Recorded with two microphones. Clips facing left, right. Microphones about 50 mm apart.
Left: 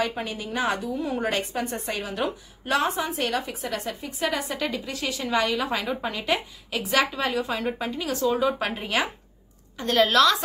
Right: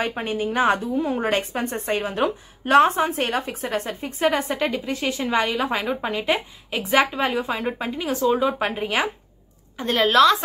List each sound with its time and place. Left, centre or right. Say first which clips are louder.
0.0 s a woman's voice: right 4 dB; right; by 10.3 s centre